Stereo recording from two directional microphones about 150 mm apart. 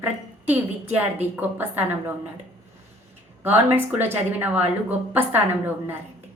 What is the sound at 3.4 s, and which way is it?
A woman's voice, 15° right (ahead or behind).